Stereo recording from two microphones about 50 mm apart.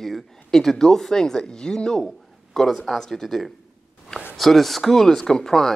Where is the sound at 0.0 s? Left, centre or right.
Centre.